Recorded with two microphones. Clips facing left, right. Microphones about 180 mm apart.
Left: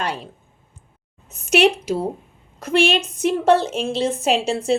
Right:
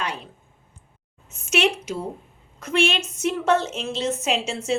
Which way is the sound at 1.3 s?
35° left (ahead or behind).